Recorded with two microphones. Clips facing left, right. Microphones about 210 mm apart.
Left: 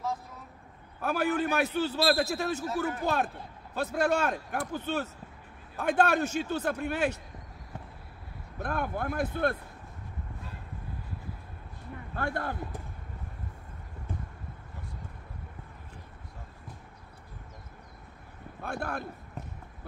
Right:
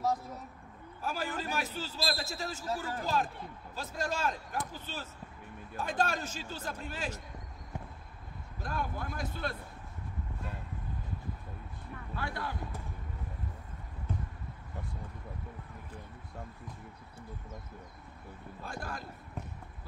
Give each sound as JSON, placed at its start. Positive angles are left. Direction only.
{"t": 1.0, "sound": "a man's voice", "side_deg": 60}
{"t": 8.5, "sound": "a man's voice", "side_deg": 60}
{"t": 12.2, "sound": "speech", "side_deg": 50}
{"t": 18.6, "sound": "a man's voice", "side_deg": 65}